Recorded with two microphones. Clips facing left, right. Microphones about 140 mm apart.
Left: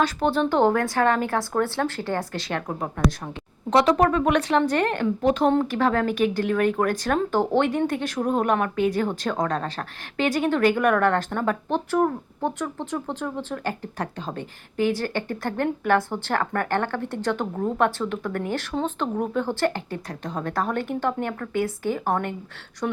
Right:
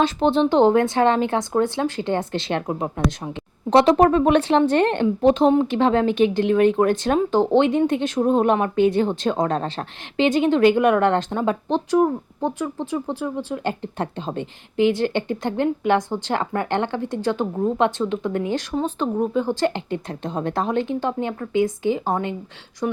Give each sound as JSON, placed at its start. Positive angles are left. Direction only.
{"t": 0.0, "sound": "a woman's voice", "side_deg": -25}
{"t": 3.7, "sound": "a woman's voice", "side_deg": -30}